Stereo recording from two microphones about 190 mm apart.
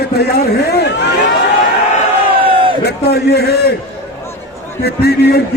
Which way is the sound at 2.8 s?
60° left (ahead or behind).